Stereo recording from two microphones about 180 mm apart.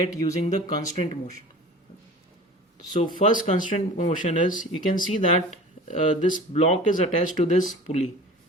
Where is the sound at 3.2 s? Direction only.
45° left (ahead or behind).